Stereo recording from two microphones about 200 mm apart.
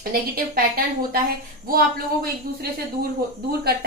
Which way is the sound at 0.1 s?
45° right (ahead or behind).